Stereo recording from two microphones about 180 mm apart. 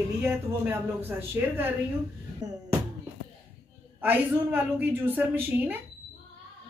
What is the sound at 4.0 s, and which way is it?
A woman's voice, 10° right (ahead or behind).